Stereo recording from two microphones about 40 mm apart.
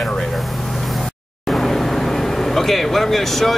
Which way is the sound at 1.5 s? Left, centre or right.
Centre.